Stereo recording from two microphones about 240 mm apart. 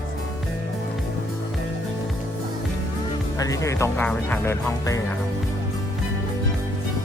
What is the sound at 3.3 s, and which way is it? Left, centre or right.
Speech, centre.